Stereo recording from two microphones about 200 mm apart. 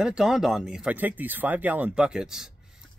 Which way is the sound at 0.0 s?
5° right (ahead or behind).